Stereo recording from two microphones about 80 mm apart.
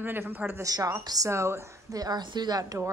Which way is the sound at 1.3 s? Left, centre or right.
Right.